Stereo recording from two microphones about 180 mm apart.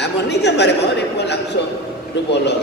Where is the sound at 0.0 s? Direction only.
70° left (ahead or behind).